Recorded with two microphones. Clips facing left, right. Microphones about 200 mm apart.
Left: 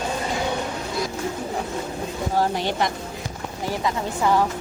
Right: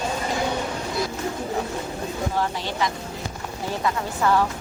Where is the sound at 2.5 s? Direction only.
60° left (ahead or behind).